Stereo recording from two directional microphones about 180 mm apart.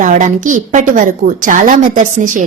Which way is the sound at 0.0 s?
45° right (ahead or behind).